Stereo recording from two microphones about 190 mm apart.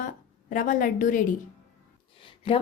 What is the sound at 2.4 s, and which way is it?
Speech, 30° left (ahead or behind).